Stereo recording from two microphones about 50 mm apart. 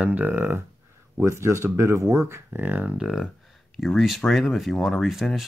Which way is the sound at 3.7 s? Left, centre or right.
Centre.